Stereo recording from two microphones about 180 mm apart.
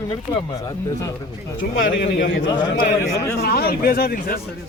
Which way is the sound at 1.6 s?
55° left (ahead or behind).